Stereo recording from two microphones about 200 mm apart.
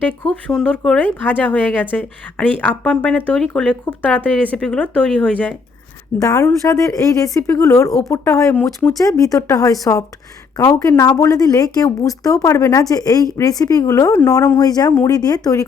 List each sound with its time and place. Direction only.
0.0 s speech: 5° left (ahead or behind)
6.2 s speech: 15° left (ahead or behind)
8.6 s speech: centre (ahead or behind)
9.0 s speech: 15° left (ahead or behind)